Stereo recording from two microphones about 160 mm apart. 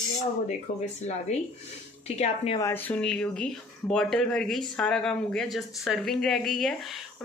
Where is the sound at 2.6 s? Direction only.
15° left (ahead or behind).